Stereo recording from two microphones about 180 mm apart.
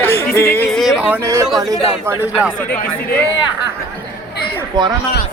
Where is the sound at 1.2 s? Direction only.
15° right (ahead or behind).